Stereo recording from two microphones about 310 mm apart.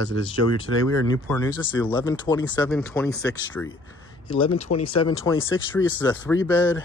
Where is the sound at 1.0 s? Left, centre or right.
Centre.